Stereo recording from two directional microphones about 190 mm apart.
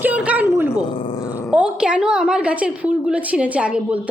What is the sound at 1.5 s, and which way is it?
A woman's voice, 5° right (ahead or behind).